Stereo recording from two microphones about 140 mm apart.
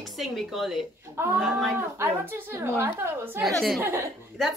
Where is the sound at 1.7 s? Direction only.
15° right (ahead or behind).